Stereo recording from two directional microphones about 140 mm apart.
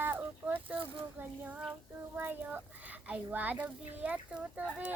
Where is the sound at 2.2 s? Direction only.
10° right (ahead or behind).